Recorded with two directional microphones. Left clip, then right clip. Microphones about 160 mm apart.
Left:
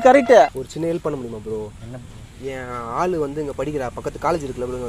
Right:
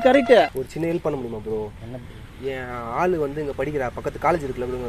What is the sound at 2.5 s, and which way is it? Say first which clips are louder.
Speech: left 2 dB; centre (ahead or behind).